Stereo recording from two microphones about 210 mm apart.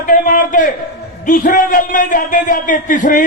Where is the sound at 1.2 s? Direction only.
40° left (ahead or behind).